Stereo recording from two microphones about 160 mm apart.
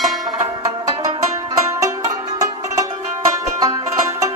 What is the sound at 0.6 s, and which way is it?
Music, 20° right (ahead or behind).